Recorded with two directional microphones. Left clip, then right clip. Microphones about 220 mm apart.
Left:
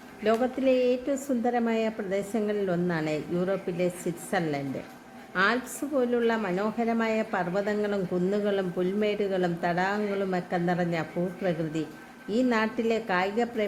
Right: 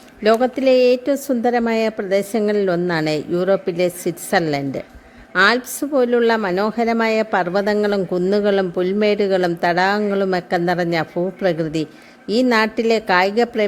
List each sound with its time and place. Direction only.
0.2 s a woman's voice: 40° right (ahead or behind)